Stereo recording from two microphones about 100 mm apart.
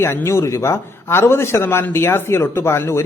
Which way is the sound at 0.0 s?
25° left (ahead or behind).